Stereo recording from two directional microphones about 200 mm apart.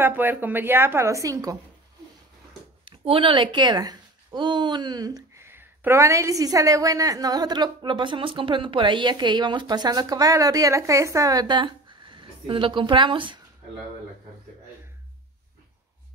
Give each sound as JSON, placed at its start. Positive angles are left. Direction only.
{"t": 0.0, "sound": "a woman's voice", "side_deg": -10}
{"t": 2.8, "sound": "speech", "side_deg": -25}